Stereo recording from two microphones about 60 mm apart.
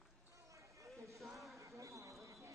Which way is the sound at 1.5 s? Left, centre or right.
Right.